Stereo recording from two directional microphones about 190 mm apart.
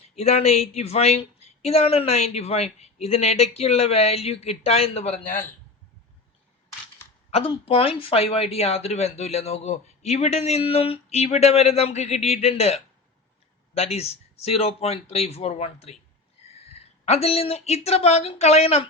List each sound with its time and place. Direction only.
0.2 s speech: 35° left (ahead or behind)
7.3 s speech: 30° left (ahead or behind)